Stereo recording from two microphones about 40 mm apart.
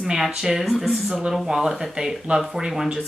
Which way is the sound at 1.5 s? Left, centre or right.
Centre.